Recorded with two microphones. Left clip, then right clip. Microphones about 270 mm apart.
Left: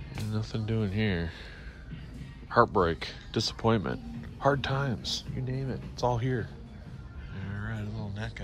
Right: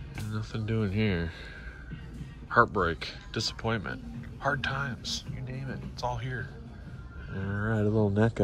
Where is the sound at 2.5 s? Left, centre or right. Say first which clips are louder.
Even; centre.